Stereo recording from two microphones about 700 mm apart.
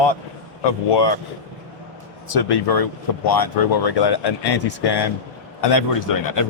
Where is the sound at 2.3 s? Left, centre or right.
Left.